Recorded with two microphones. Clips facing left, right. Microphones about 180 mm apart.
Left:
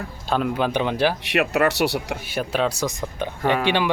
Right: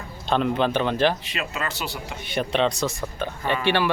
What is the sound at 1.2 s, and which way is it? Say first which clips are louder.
Speech: left 10 dB; 70° left (ahead or behind).